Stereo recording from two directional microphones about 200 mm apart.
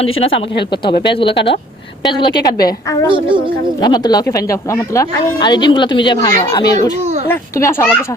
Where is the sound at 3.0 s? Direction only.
25° right (ahead or behind).